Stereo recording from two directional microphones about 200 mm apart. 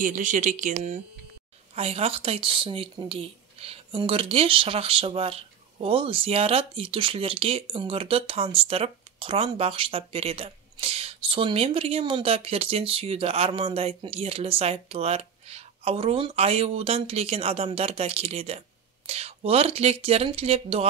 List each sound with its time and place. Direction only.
0.0 s speech: 40° right (ahead or behind)